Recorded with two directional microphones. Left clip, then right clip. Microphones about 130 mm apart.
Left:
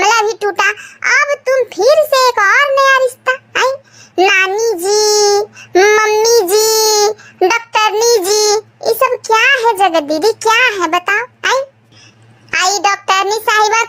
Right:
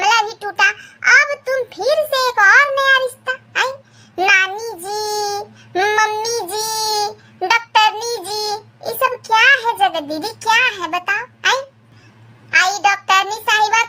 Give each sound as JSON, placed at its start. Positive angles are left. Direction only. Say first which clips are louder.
{"t": 0.0, "sound": "child singing", "louder": "left 4 dB", "side_deg": 40}